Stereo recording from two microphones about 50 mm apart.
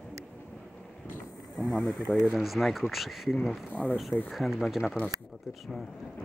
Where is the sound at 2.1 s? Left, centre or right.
Centre.